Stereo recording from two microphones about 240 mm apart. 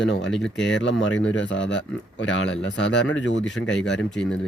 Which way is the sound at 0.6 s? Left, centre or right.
Left.